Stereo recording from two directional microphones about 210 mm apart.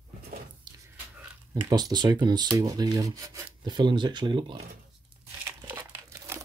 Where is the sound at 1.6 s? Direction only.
20° right (ahead or behind).